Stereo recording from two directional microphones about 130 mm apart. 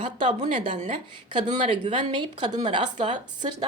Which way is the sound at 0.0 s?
40° right (ahead or behind).